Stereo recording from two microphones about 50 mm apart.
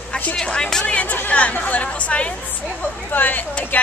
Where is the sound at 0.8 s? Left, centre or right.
Left.